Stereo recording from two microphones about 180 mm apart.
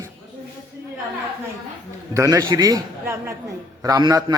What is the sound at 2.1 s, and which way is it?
A man's voice, 20° right (ahead or behind).